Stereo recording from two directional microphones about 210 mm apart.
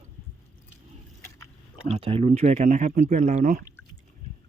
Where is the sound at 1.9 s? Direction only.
25° right (ahead or behind).